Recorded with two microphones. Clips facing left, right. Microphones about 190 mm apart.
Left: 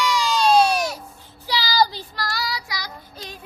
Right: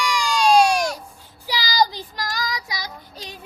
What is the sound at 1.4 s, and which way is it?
Child singing, 15° right (ahead or behind).